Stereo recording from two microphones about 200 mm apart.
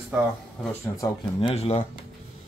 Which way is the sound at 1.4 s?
30° left (ahead or behind).